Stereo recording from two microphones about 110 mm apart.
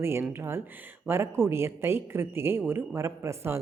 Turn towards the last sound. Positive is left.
turn(degrees=-25)  # may be behind; listen again after turning